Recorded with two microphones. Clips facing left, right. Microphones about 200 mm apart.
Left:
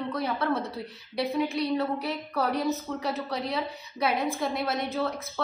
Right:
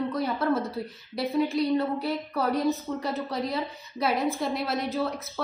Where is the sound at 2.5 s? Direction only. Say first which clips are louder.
Right 2 dB; centre (ahead or behind).